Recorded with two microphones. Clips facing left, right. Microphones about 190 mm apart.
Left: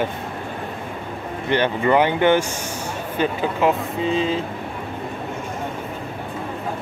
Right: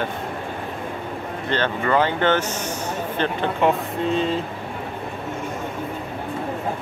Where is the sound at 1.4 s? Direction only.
15° left (ahead or behind).